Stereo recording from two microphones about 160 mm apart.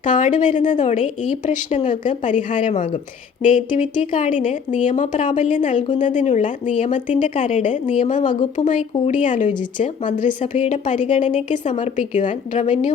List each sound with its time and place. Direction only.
0.0 s a woman's voice: 55° left (ahead or behind)